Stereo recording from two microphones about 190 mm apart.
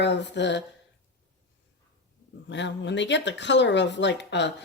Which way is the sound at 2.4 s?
70° left (ahead or behind).